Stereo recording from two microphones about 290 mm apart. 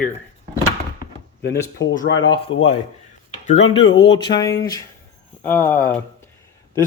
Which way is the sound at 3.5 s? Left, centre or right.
Centre.